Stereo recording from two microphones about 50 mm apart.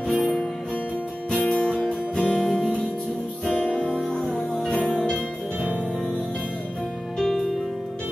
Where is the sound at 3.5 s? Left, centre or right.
Left.